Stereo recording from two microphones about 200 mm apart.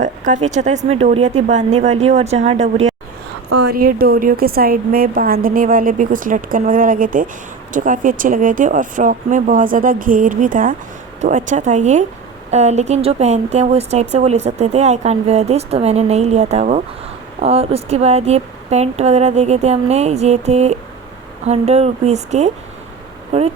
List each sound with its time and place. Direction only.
0.0 s speech: 40° right (ahead or behind)
3.7 s a woman's voice: 45° right (ahead or behind); by 23.5 s 30° right (ahead or behind)